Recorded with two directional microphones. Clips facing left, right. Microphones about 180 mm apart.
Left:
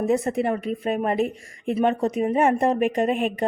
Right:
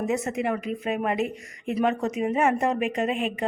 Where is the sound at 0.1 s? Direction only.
35° left (ahead or behind).